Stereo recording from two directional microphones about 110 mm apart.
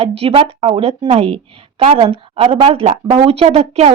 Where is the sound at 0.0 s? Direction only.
60° right (ahead or behind).